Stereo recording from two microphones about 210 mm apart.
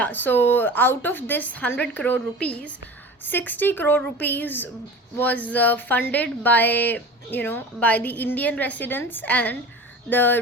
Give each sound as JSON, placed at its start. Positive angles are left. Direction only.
{"t": 0.0, "sound": "speech", "side_deg": 10}